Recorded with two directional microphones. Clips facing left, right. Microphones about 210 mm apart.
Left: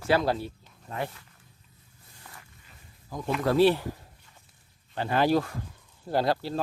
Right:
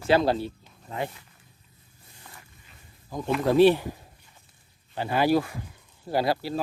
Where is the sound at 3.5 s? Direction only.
15° right (ahead or behind).